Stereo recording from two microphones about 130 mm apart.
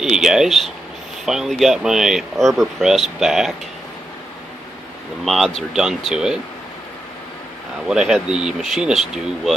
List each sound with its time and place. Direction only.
0.0 s speech: 5° right (ahead or behind)
5.2 s speech: centre (ahead or behind)
7.9 s speech: 5° right (ahead or behind)